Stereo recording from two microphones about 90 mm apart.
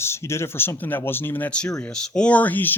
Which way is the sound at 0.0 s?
30° left (ahead or behind).